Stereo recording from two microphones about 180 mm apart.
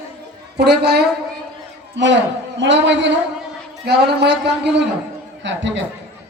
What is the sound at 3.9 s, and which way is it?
Speech, 65° right (ahead or behind).